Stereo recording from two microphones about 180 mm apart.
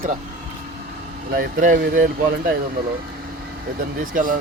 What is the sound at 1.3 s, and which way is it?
Speech, 50° right (ahead or behind).